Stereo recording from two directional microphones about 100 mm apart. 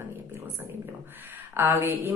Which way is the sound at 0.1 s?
25° right (ahead or behind).